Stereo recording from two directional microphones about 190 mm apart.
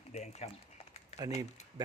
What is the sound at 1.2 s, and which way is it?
Speech, 15° right (ahead or behind).